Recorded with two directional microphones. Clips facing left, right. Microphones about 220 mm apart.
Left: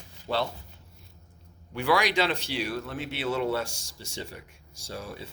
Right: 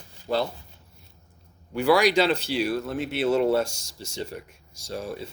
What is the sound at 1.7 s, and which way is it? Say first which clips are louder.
Speech: right 6 dB; 40° right (ahead or behind).